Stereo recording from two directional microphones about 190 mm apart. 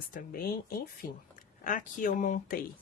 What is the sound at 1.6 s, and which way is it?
Speech, 45° left (ahead or behind).